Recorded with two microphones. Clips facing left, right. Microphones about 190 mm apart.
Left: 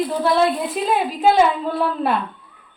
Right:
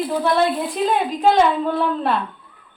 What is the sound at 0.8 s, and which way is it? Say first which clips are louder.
Speech: right 2 dB; 5° left (ahead or behind).